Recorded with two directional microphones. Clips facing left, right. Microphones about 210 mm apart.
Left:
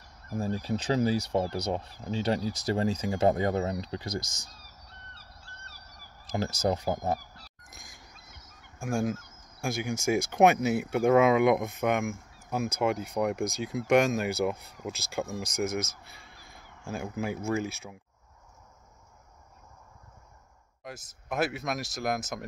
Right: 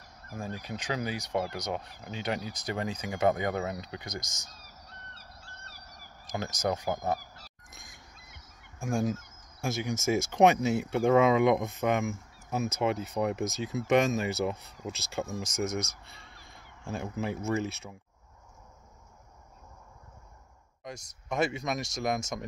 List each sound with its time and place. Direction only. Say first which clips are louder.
0.4 s speech: left 7 dB; 35° left (ahead or behind)
6.7 s speech: even; 30° left (ahead or behind)
7.6 s a sound: left 1 dB; centre (ahead or behind)
8.7 s speech: even; centre (ahead or behind)
20.8 s speech: right 1 dB; 5° left (ahead or behind)